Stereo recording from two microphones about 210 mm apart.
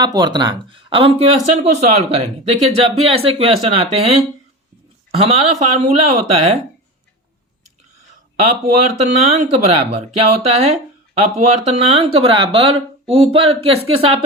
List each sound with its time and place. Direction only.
0.0 s speech: 20° right (ahead or behind)
8.4 s speech: 30° right (ahead or behind)